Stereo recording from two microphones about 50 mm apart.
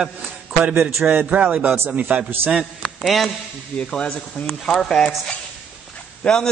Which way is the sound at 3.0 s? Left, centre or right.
Centre.